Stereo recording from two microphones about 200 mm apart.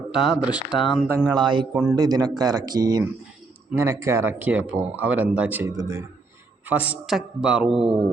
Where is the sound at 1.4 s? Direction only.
25° right (ahead or behind).